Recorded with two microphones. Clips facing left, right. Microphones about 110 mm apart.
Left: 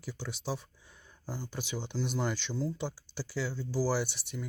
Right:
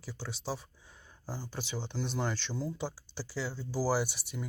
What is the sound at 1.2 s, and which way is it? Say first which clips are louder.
Speech: left 1 dB; 35° right (ahead or behind).